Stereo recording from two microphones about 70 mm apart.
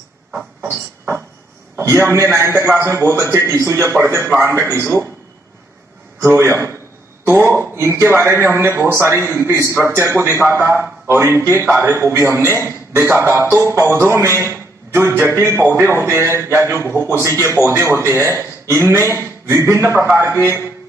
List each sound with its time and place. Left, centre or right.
0.3 s a sound: centre
1.8 s a man's voice: right
6.2 s a man's voice: right